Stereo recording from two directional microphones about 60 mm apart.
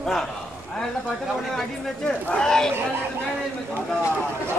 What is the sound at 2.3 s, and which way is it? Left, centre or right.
Speech, centre.